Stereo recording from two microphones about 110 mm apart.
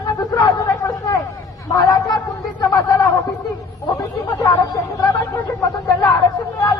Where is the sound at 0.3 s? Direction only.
35° left (ahead or behind).